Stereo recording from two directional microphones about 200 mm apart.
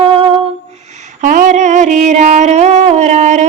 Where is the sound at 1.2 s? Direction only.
40° right (ahead or behind).